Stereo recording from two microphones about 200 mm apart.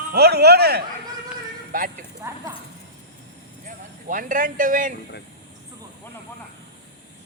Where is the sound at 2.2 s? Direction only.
15° right (ahead or behind).